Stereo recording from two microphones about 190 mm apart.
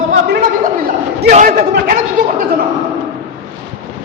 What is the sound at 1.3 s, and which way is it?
A man's voice, 45° right (ahead or behind).